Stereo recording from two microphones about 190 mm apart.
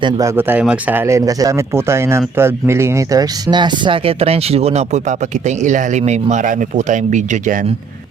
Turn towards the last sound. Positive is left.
turn(degrees=-40)  # may be behind; listen again after turning